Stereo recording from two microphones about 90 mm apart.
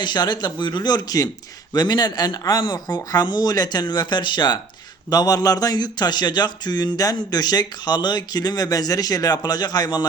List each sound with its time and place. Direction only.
0.0 s speech: 55° left (ahead or behind)